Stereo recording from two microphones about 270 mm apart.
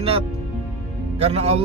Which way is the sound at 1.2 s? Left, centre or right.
Right.